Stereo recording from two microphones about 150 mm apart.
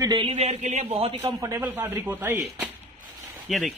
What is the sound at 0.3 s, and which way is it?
Speech, 45° right (ahead or behind).